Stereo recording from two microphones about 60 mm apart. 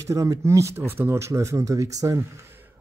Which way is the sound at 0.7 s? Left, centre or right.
Right.